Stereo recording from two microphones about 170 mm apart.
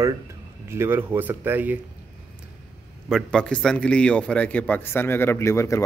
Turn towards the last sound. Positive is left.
turn(degrees=15)  # may be behind; listen again after turning